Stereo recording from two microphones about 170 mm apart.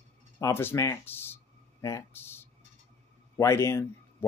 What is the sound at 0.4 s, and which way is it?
Speech, 15° left (ahead or behind).